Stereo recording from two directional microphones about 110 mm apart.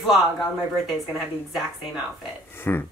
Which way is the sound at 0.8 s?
Centre (ahead or behind).